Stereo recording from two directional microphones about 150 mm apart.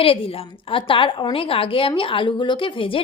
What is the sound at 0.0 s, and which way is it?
Speech, 40° left (ahead or behind).